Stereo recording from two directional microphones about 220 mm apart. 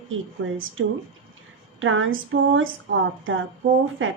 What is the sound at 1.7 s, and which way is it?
Speech, 65° right (ahead or behind).